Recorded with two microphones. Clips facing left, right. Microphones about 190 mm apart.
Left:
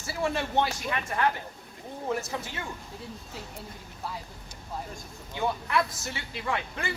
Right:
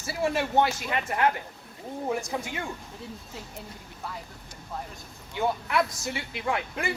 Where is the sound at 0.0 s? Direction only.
20° right (ahead or behind).